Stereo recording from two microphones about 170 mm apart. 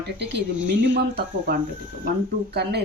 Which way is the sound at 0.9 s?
75° right (ahead or behind).